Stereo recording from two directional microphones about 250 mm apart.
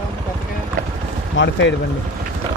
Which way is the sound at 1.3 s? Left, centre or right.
Left.